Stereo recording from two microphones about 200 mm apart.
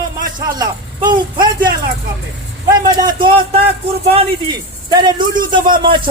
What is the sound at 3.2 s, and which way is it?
Speech, 25° right (ahead or behind).